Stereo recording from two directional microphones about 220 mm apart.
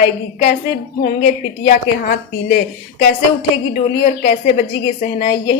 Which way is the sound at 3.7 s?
35° left (ahead or behind).